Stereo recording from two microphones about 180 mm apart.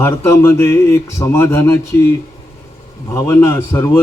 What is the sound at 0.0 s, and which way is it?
Speech, 15° left (ahead or behind).